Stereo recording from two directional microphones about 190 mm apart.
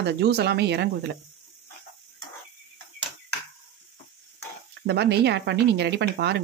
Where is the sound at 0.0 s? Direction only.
60° right (ahead or behind).